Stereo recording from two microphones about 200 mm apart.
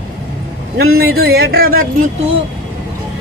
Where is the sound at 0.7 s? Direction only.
50° right (ahead or behind).